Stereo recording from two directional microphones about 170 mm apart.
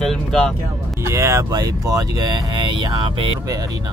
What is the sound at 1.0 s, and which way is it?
Speech, 15° right (ahead or behind).